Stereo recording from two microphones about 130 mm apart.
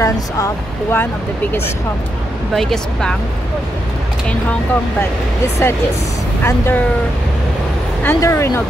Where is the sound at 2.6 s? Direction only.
5° left (ahead or behind).